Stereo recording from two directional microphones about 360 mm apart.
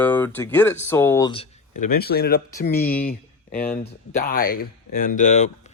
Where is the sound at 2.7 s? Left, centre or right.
Centre.